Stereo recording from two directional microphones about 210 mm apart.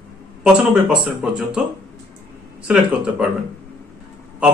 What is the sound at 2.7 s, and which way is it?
Speech, 5° right (ahead or behind).